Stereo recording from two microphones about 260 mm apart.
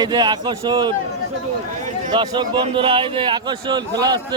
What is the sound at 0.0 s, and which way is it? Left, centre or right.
Speech, centre.